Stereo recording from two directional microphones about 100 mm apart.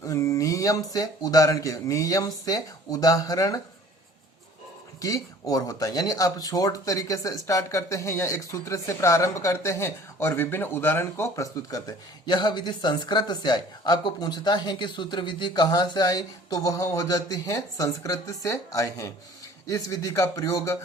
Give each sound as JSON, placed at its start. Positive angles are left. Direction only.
{"t": 0.0, "sound": "a sound", "side_deg": 30}
{"t": 0.9, "sound": "speech", "side_deg": 40}
{"t": 4.9, "sound": "speech", "side_deg": 35}
{"t": 11.3, "sound": "speech", "side_deg": 40}